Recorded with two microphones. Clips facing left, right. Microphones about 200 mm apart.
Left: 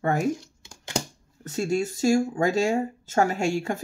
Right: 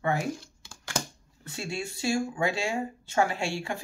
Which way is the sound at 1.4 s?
45° left (ahead or behind).